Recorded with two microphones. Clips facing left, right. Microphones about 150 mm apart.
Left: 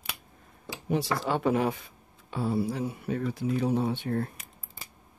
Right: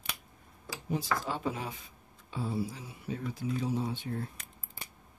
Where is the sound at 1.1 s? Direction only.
70° left (ahead or behind).